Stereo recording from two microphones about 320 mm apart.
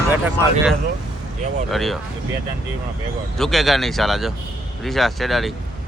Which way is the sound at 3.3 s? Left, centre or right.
Centre.